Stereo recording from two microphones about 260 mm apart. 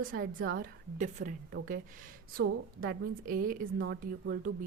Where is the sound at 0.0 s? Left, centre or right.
Right.